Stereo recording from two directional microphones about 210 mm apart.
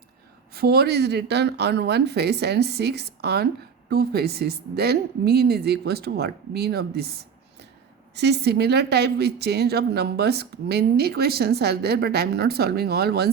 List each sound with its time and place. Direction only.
0.5 s speech: 50° right (ahead or behind)
8.1 s speech: 50° right (ahead or behind)